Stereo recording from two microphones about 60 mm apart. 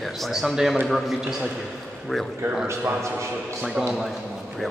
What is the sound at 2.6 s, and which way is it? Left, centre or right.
Speech, right.